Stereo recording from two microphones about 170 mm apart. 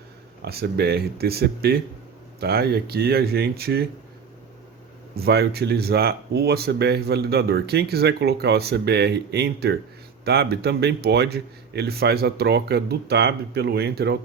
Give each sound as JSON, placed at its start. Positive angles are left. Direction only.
{"t": 0.4, "sound": "speech", "side_deg": -70}
{"t": 5.1, "sound": "speech", "side_deg": -70}